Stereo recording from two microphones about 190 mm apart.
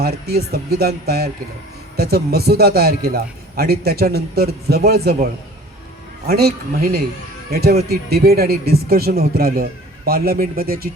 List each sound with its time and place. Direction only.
0.0 s a man's voice: 55° right (ahead or behind)